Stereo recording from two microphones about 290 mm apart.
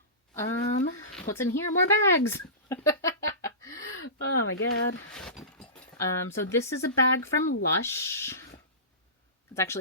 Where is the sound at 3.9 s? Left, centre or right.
Left.